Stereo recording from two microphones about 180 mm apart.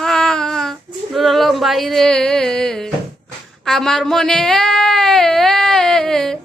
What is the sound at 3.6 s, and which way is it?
Speech, centre (ahead or behind).